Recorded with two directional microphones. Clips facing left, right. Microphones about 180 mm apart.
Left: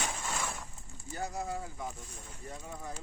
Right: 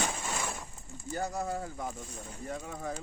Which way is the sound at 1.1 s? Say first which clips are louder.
Right 3 dB; 40° right (ahead or behind).